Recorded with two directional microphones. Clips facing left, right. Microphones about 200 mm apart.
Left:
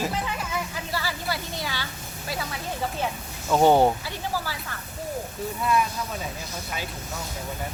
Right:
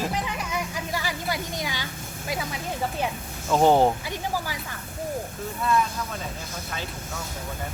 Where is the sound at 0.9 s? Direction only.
15° right (ahead or behind).